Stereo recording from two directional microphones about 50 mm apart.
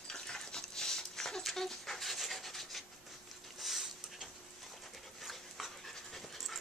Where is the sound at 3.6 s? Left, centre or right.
Centre.